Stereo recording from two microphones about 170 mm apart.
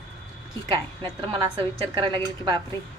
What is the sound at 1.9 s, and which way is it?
Speech, 30° right (ahead or behind).